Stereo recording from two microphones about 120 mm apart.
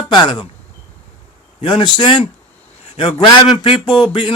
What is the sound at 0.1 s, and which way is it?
Speech, 40° left (ahead or behind).